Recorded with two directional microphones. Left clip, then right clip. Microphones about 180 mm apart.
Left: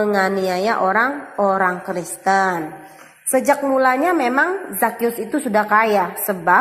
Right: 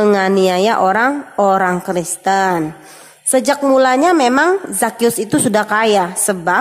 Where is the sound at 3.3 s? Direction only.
45° right (ahead or behind).